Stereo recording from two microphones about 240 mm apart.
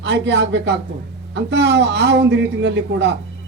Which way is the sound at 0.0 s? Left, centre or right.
Right.